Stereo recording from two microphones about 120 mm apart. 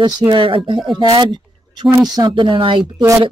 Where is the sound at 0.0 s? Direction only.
40° right (ahead or behind).